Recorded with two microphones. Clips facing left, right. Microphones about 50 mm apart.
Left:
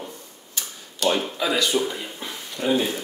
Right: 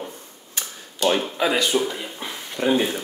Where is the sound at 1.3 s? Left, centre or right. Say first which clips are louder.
Right 2 dB; right.